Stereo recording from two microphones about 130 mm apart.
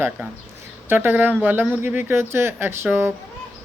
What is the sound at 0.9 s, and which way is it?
Speech, 15° right (ahead or behind).